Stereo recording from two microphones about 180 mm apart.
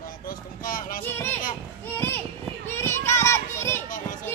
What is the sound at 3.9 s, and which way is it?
Children playing, 45° left (ahead or behind).